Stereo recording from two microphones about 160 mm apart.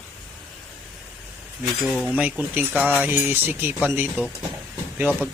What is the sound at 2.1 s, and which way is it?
Speech, 10° right (ahead or behind).